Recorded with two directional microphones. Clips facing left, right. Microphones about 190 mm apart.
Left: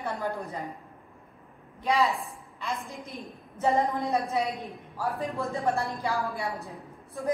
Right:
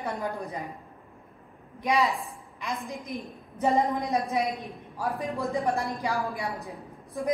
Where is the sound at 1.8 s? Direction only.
15° right (ahead or behind).